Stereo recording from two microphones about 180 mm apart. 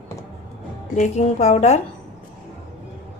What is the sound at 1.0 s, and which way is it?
Speech, 40° left (ahead or behind).